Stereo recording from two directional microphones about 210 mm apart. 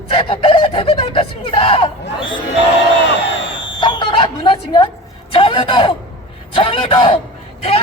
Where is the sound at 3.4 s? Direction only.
60° left (ahead or behind).